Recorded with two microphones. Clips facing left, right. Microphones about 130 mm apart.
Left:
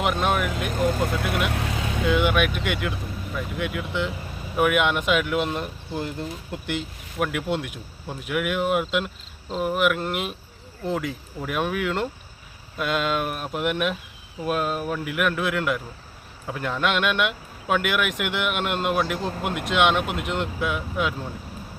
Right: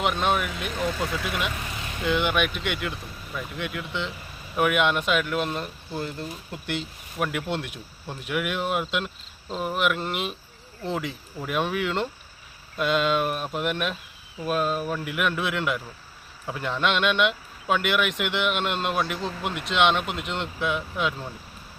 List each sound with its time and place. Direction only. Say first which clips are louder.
0.0 s speech: left 1 dB; 5° left (ahead or behind)
0.7 s speech: left 4 dB; 45° left (ahead or behind); by 2.0 s 90° left
2.0 s speech: left 2 dB; 5° left (ahead or behind)
19.2 s speech: left 2 dB; 50° left (ahead or behind)
19.7 s speech: left 1 dB; 10° left (ahead or behind)
20.1 s speech: left 3 dB; 55° left (ahead or behind)
20.3 s speech: even; 5° left (ahead or behind)